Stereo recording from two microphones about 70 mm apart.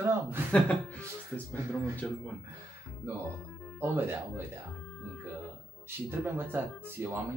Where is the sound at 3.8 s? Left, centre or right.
Right.